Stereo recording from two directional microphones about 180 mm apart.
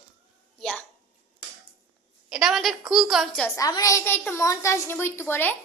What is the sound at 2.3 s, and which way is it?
A child's voice, centre (ahead or behind).